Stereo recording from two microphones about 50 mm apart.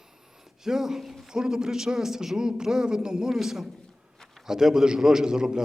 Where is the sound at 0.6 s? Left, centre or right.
Centre.